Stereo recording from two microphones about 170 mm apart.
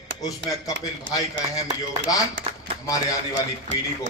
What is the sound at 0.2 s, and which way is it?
Speech, 20° left (ahead or behind).